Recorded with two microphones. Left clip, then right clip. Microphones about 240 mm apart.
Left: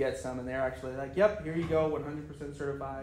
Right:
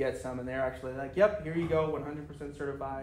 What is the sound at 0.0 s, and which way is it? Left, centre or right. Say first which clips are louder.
A man's voice: left 1 dB; centre.